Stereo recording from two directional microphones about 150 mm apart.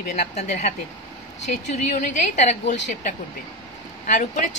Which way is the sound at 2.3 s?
50° left (ahead or behind).